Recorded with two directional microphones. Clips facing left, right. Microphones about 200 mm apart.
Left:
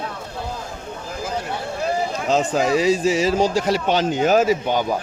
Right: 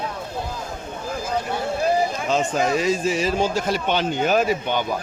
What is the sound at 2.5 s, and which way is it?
Speech, 90° left.